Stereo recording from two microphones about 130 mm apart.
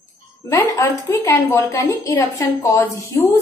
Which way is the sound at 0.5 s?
20° left (ahead or behind).